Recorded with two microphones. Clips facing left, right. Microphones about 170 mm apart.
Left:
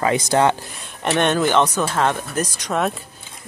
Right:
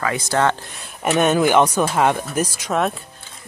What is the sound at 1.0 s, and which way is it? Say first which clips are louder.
Speech: right 2 dB; 5° right (ahead or behind).